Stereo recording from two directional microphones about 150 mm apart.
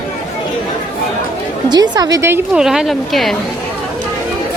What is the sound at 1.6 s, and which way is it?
Speech, 30° right (ahead or behind).